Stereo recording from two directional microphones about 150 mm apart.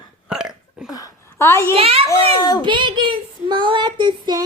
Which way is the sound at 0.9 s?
25° left (ahead or behind).